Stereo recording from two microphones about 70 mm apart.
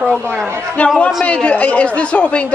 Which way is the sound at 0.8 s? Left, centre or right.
Centre.